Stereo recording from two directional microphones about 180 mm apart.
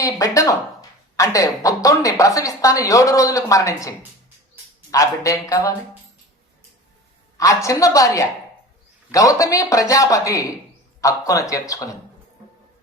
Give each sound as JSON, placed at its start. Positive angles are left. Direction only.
{"t": 0.0, "sound": "speech", "side_deg": 20}
{"t": 7.3, "sound": "speech", "side_deg": 20}